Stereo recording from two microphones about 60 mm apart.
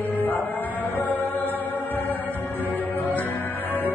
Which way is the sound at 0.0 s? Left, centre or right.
Left.